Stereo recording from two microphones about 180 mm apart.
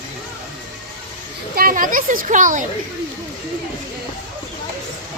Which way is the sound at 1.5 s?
50° right (ahead or behind).